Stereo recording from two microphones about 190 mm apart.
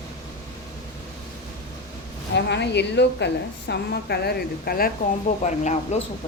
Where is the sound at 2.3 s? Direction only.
65° left (ahead or behind).